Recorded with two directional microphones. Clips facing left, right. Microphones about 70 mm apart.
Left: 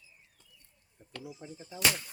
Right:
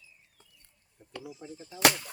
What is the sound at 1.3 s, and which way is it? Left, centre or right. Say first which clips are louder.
Speech: right 1 dB; centre.